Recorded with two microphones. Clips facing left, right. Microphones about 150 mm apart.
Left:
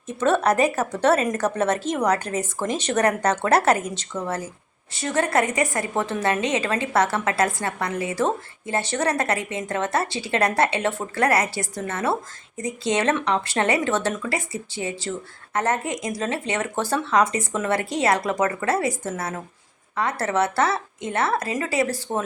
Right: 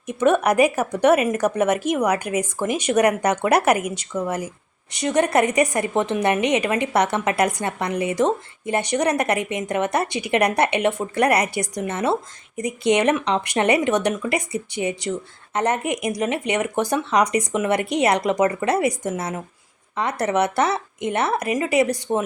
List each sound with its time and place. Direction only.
0.1 s a woman's voice: 15° right (ahead or behind)